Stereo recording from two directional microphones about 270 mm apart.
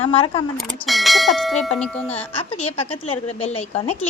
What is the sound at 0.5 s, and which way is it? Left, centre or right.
Speech, centre.